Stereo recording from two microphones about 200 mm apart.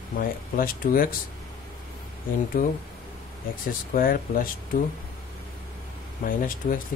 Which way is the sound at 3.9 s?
45° left (ahead or behind).